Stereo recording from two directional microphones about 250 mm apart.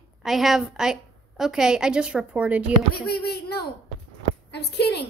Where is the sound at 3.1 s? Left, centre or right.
Left.